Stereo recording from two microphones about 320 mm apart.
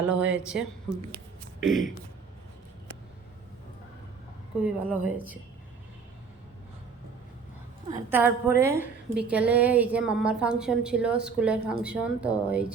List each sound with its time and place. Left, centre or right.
0.1 s a woman's voice: centre
4.6 s a woman's voice: centre
7.9 s a woman's voice: centre